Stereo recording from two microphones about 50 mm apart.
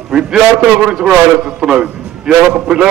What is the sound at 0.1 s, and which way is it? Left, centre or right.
A man's voice, centre.